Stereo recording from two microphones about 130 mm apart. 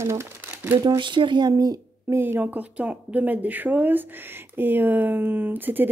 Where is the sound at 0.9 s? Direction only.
40° right (ahead or behind).